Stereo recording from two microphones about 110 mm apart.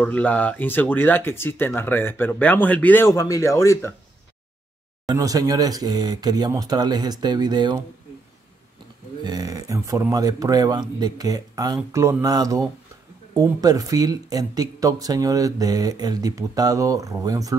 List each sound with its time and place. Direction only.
0.0 s speech: 15° left (ahead or behind)
3.2 s speech: 30° left (ahead or behind)
5.0 s speech: 35° right (ahead or behind)
9.2 s speech: 35° right (ahead or behind)